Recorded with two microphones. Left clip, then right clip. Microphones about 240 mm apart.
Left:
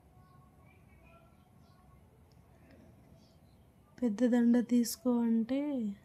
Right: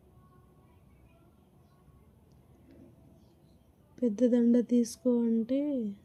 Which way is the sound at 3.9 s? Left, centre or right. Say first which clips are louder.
Right 4 dB; centre.